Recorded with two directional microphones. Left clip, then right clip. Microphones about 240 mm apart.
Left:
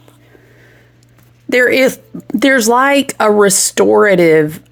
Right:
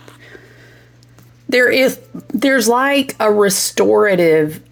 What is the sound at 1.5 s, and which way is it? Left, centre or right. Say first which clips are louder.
Speech: left 2 dB; centre.